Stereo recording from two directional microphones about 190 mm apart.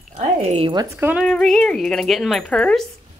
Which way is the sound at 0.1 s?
35° right (ahead or behind).